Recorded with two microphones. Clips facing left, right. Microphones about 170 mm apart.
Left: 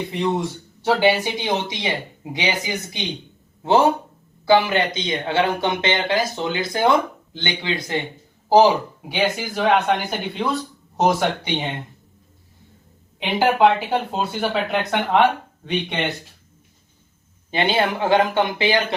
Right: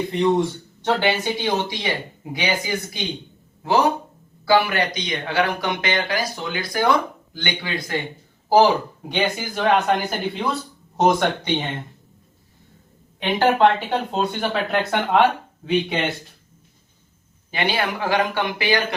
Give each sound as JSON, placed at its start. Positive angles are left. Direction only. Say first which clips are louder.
{"t": 0.1, "sound": "speech", "louder": "right 5 dB", "side_deg": 5}
{"t": 9.1, "sound": "speech", "louder": "left 1 dB", "side_deg": 0}
{"t": 13.1, "sound": "speech", "louder": "even", "side_deg": 10}
{"t": 17.5, "sound": "speech", "louder": "left 3 dB", "side_deg": 25}